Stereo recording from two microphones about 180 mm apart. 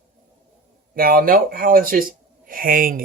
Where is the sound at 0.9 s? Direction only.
55° right (ahead or behind).